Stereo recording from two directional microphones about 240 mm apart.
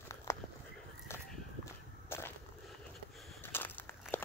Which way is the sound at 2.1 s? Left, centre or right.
Centre.